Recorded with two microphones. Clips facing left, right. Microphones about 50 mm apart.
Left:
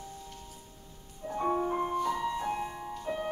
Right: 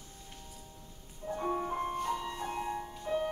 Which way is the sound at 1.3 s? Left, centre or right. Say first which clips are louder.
Left 4 dB; centre.